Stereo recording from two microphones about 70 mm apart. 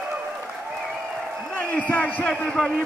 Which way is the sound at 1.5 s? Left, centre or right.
Left.